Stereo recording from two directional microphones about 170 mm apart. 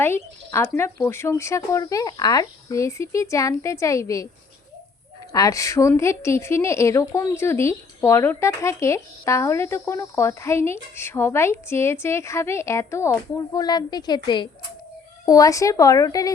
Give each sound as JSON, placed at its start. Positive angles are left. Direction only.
{"t": 0.0, "sound": "a woman's voice", "side_deg": 15}
{"t": 5.3, "sound": "a woman's voice", "side_deg": 20}
{"t": 15.3, "sound": "speech", "side_deg": 20}